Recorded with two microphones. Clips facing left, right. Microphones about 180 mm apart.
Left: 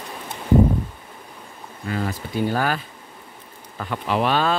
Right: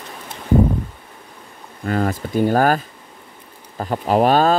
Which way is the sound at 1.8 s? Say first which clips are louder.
Right 6 dB; 50° right (ahead or behind).